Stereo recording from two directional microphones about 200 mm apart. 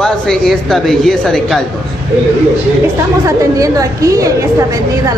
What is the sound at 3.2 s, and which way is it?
A woman's voice, 15° right (ahead or behind).